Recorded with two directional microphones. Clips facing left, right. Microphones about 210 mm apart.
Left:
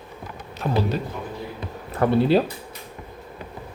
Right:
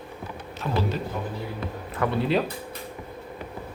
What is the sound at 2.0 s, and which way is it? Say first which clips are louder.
Speech: left 6 dB; 35° left (ahead or behind).